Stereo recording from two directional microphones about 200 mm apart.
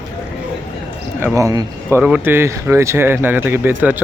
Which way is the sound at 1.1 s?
15° right (ahead or behind).